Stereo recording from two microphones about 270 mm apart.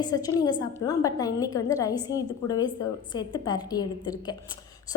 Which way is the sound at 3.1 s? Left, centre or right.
Centre.